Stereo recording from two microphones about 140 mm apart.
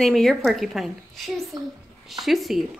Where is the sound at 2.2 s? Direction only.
Centre (ahead or behind).